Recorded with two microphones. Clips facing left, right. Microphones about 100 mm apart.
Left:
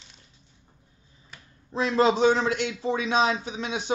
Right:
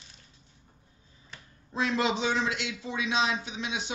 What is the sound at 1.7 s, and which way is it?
A man's voice, 35° left (ahead or behind).